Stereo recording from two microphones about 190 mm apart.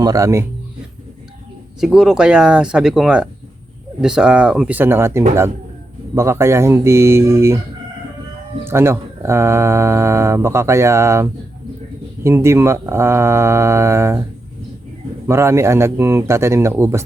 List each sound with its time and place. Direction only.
0.0 s speech: 15° right (ahead or behind)
1.8 s speech: centre (ahead or behind)
8.6 s speech: 15° right (ahead or behind)
15.3 s speech: 15° right (ahead or behind)